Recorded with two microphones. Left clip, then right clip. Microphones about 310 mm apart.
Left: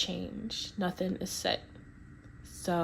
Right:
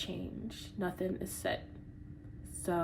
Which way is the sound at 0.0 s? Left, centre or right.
Left.